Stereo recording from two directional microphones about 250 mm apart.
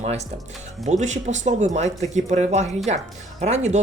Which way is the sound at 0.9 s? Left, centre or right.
Right.